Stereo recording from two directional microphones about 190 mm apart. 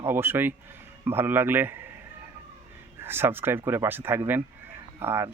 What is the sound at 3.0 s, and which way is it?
Speech, 10° right (ahead or behind).